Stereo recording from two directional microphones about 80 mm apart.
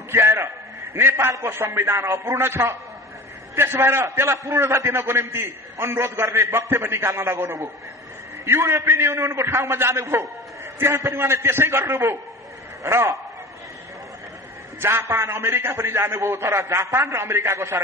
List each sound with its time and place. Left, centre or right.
0.1 s a man's voice: right
14.8 s a man's voice: right